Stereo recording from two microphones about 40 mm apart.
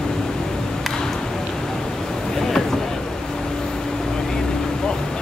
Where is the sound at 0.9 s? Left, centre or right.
Centre.